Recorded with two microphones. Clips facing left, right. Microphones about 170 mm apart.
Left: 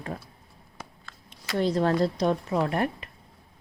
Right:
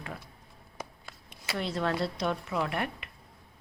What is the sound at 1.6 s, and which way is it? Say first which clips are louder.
Speech: left 7 dB; 35° left (ahead or behind).